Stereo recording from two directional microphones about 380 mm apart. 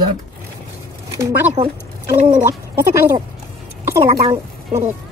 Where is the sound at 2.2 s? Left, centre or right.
Centre.